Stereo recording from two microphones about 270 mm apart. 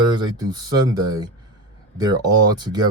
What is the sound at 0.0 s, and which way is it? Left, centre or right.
Speech, centre.